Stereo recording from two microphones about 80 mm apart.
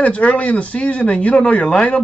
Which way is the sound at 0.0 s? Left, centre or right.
Centre.